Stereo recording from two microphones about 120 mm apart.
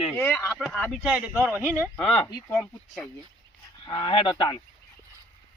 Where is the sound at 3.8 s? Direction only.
45° left (ahead or behind).